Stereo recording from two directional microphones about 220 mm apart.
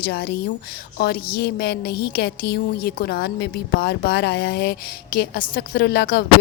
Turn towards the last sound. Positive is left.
turn(degrees=45)  # may be behind; listen again after turning